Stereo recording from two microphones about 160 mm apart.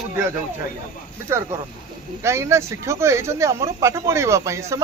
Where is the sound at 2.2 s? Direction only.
15° right (ahead or behind).